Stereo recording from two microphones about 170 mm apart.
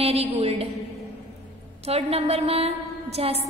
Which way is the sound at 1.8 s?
35° right (ahead or behind).